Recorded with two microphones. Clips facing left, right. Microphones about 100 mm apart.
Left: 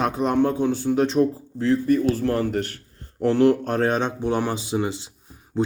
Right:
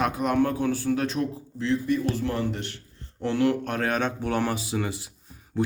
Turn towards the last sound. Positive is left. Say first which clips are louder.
# left 3 dB
turn(degrees=25)  # may be behind; listen again after turning